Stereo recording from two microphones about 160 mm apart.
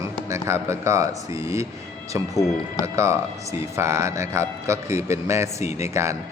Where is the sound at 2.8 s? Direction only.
20° right (ahead or behind).